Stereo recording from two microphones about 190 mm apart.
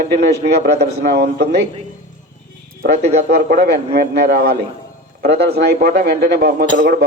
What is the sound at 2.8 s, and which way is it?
Speech, 60° right (ahead or behind).